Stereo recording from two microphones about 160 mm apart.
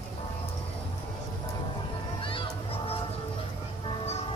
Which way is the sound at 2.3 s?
35° left (ahead or behind).